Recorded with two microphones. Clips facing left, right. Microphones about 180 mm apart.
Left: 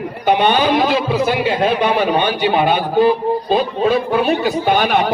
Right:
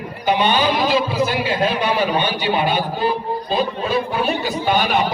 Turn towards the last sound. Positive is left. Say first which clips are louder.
# left 3 dB
turn(degrees=50)  # may be behind; listen again after turning